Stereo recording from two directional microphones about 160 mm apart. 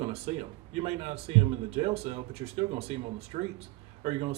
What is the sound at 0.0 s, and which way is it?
Speech, 40° right (ahead or behind).